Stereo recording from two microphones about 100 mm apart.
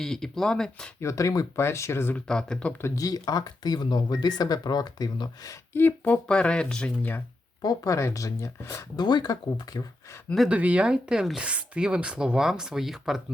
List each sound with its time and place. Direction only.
0.0 s speech: 5° left (ahead or behind)
0.9 s speech: 30° left (ahead or behind)
2.1 s speech: 5° left (ahead or behind)
2.8 s speech: 35° left (ahead or behind)
5.7 s speech: 20° left (ahead or behind)
6.2 s speech: 10° left (ahead or behind)
7.6 s speech: 35° left (ahead or behind)
9.0 s speech: 45° left (ahead or behind)
10.5 s speech: 15° right (ahead or behind)